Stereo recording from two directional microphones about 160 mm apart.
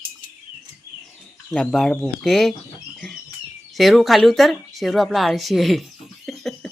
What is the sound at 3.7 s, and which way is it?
Speech, centre (ahead or behind).